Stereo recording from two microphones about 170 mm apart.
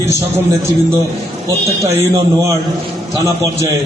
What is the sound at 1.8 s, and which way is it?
Speech, 15° right (ahead or behind).